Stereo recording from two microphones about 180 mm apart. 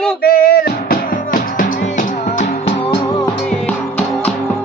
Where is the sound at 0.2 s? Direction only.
55° left (ahead or behind).